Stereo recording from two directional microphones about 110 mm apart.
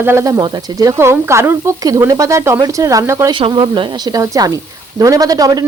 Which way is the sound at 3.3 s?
45° right (ahead or behind).